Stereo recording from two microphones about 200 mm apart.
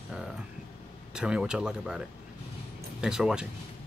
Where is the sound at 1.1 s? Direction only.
5° right (ahead or behind).